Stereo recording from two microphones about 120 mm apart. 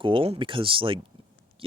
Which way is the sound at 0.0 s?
45° right (ahead or behind).